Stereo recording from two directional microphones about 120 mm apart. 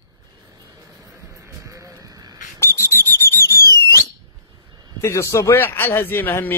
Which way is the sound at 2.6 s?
25° left (ahead or behind).